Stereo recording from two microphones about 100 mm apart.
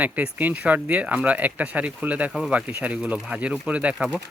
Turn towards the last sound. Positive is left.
turn(degrees=-15)  # may be behind; listen again after turning